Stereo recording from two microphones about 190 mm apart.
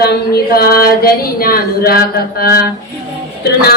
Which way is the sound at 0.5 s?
50° left (ahead or behind).